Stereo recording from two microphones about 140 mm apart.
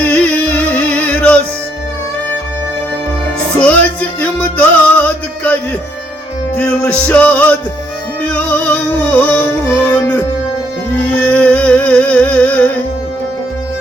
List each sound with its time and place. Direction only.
0.0 s music: 10° left (ahead or behind)
3.6 s music: 10° left (ahead or behind)
6.6 s music: 10° left (ahead or behind)